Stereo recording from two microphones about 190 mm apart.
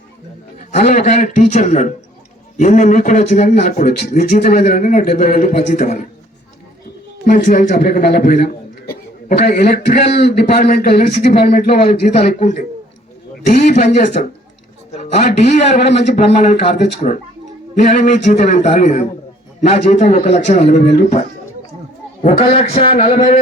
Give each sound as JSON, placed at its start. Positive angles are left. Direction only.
{"t": 0.7, "sound": "speech", "side_deg": 40}
{"t": 4.6, "sound": "speech", "side_deg": 40}
{"t": 7.3, "sound": "a man's voice", "side_deg": 45}
{"t": 9.5, "sound": "speech", "side_deg": 55}
{"t": 11.4, "sound": "speech", "side_deg": 35}
{"t": 13.7, "sound": "speech", "side_deg": 40}
{"t": 17.9, "sound": "a man's voice", "side_deg": 40}
{"t": 23.0, "sound": "a sound", "side_deg": 30}